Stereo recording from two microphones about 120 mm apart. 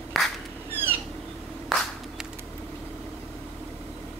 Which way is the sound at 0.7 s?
15° right (ahead or behind).